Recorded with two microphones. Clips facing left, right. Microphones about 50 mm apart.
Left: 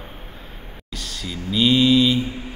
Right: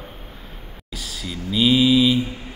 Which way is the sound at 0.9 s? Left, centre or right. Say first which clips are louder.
Even; centre.